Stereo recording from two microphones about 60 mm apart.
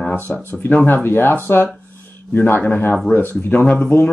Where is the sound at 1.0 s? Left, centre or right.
Left.